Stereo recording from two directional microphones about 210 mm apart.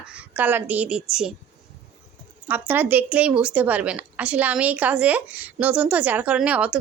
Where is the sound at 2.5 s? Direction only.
10° right (ahead or behind).